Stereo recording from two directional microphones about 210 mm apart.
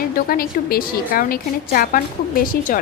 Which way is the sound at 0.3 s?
45° left (ahead or behind).